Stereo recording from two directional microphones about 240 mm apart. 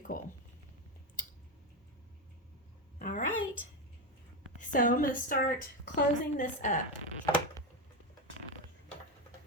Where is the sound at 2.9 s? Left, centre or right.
Left.